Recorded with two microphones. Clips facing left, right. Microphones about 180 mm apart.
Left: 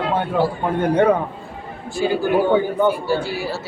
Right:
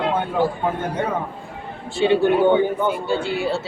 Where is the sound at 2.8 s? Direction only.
20° right (ahead or behind).